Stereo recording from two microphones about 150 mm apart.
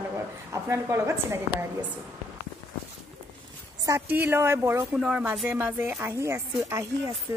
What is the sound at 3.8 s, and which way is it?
A woman's voice, 15° right (ahead or behind).